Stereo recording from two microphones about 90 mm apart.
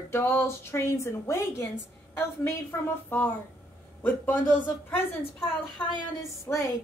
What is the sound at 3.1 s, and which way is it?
A woman's voice, 15° left (ahead or behind).